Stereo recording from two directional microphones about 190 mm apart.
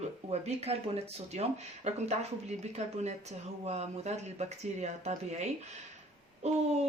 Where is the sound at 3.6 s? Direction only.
35° right (ahead or behind).